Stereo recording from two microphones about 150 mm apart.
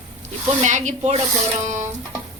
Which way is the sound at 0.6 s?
55° right (ahead or behind).